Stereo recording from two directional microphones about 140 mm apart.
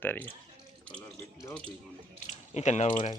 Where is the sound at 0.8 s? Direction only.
10° left (ahead or behind).